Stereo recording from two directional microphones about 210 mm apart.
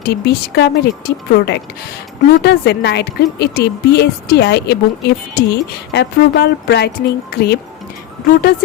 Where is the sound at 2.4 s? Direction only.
50° left (ahead or behind).